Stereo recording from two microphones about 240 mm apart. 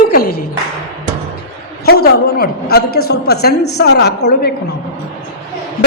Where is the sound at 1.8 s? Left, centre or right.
Left.